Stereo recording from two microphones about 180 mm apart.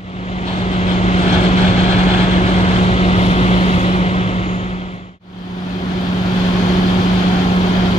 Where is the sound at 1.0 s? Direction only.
40° left (ahead or behind).